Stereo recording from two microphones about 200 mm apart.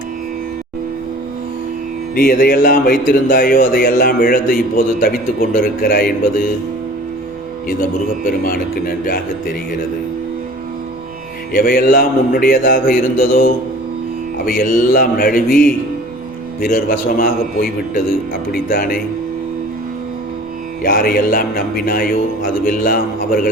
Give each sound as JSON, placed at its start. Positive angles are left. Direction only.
{"t": 2.1, "sound": "speech", "side_deg": 45}
{"t": 8.4, "sound": "speech", "side_deg": 45}
{"t": 11.5, "sound": "speech", "side_deg": 45}
{"t": 16.6, "sound": "speech", "side_deg": 45}
{"t": 20.8, "sound": "speech", "side_deg": 45}